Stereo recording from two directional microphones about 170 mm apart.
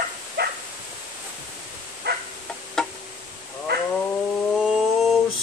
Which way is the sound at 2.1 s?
75° right (ahead or behind).